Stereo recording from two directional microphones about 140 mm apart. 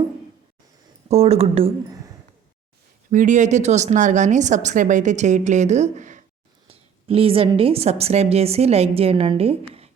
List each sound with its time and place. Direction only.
1.0 s a woman's voice: 50° right (ahead or behind)
3.1 s a woman's voice: 65° right (ahead or behind)
6.7 s a woman's voice: 40° right (ahead or behind)